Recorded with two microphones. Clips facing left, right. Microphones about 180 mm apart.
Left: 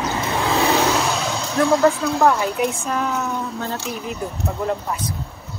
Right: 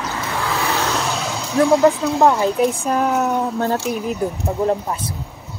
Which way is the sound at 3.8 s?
5° right (ahead or behind).